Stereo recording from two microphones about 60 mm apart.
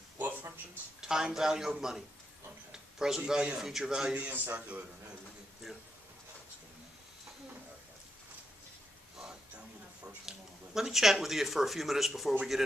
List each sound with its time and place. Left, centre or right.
0.2 s a sound: right
1.0 s a man's voice: centre
2.7 s a sound: centre
3.3 s a man's voice: centre
4.2 s a man's voice: right
4.6 s a man's voice: right
10.0 s speech: centre